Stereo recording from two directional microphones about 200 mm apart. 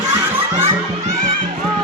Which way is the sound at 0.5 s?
15° right (ahead or behind).